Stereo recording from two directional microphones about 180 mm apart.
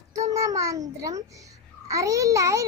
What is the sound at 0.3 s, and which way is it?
A child's voice, 15° right (ahead or behind).